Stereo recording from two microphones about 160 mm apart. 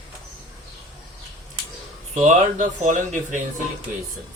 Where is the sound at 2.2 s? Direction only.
50° right (ahead or behind).